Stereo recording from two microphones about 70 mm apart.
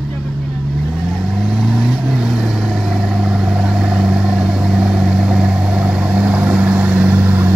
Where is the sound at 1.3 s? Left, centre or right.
Centre.